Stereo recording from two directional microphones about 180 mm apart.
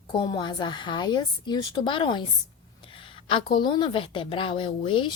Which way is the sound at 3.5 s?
25° left (ahead or behind).